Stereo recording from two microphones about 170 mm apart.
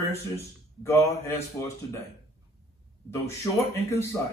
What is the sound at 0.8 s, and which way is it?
Speech, 15° left (ahead or behind).